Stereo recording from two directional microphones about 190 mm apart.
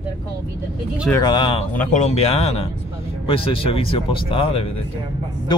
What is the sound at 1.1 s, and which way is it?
Speech, 25° left (ahead or behind).